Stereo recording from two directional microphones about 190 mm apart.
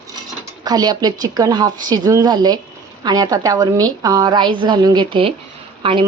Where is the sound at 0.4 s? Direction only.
20° right (ahead or behind).